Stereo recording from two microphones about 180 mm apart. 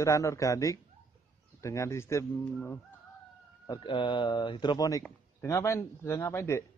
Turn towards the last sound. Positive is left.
turn(degrees=15)  # may be behind; listen again after turning